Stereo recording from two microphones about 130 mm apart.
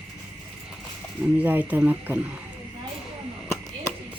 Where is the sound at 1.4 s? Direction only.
15° right (ahead or behind).